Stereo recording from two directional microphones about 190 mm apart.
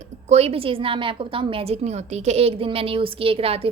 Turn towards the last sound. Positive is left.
turn(degrees=-30)  # may be behind; listen again after turning